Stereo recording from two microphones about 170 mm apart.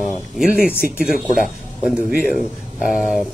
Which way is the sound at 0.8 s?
60° left (ahead or behind).